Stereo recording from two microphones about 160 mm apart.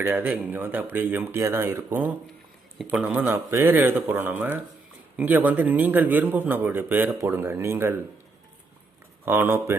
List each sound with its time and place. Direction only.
0.0 s a man's voice: 10° right (ahead or behind)
9.2 s a man's voice: 15° right (ahead or behind)